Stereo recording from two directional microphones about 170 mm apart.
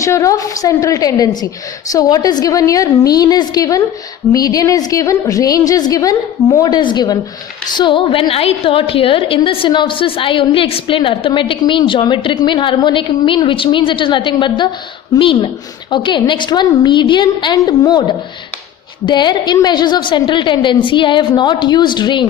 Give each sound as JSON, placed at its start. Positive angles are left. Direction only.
{"t": 0.0, "sound": "a woman's voice", "side_deg": 20}
{"t": 19.0, "sound": "a woman's voice", "side_deg": 25}